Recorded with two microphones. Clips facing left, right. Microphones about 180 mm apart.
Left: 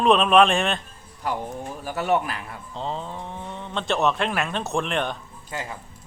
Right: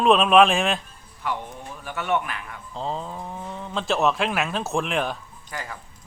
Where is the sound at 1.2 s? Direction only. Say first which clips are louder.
Left 2 dB; 40° left (ahead or behind).